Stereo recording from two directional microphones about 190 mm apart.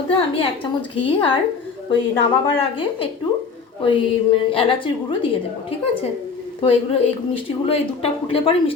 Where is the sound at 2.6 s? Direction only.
30° left (ahead or behind).